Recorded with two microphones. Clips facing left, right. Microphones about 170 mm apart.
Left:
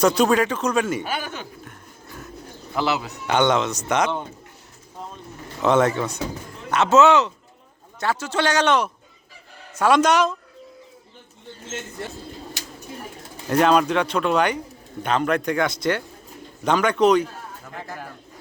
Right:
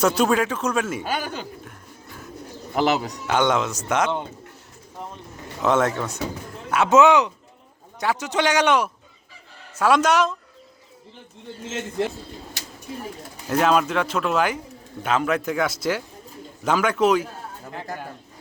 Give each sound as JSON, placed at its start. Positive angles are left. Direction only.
{"t": 0.0, "sound": "speech", "side_deg": -5}
{"t": 2.7, "sound": "a man's voice", "side_deg": -40}
{"t": 3.2, "sound": "speech", "side_deg": -5}
{"t": 5.6, "sound": "a man's voice", "side_deg": 0}
{"t": 13.5, "sound": "speech", "side_deg": 0}